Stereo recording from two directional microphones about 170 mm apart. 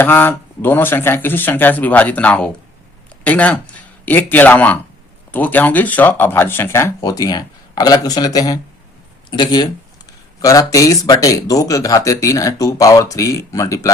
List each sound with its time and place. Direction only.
0.0 s speech: 10° left (ahead or behind)